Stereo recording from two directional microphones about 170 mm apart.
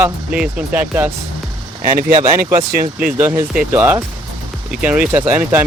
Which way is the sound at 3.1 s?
15° right (ahead or behind).